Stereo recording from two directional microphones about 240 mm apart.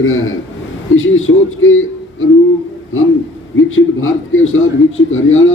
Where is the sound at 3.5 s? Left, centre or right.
Left.